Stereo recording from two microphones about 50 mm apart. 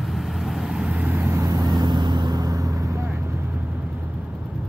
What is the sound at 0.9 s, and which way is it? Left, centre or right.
Vehicle, right.